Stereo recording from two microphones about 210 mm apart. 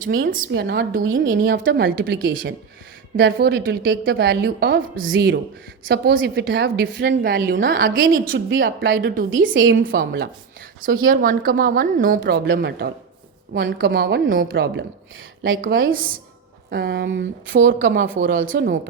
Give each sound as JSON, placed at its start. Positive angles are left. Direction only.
{"t": 0.0, "sound": "a woman's voice", "side_deg": -40}
{"t": 1.1, "sound": "a woman's voice", "side_deg": -60}
{"t": 1.4, "sound": "a woman's voice", "side_deg": -40}
{"t": 8.4, "sound": "a woman's voice", "side_deg": -60}
{"t": 9.7, "sound": "a woman's voice", "side_deg": -45}
{"t": 15.7, "sound": "a woman's voice", "side_deg": -65}
{"t": 16.6, "sound": "a woman's voice", "side_deg": -45}
{"t": 17.6, "sound": "a woman's voice", "side_deg": -60}
{"t": 18.5, "sound": "a woman's voice", "side_deg": -45}